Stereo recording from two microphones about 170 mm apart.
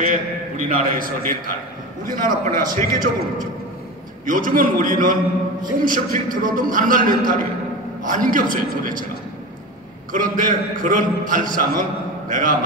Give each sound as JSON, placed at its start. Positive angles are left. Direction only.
{"t": 0.0, "sound": "a man's voice", "side_deg": -50}
{"t": 10.1, "sound": "a man's voice", "side_deg": -50}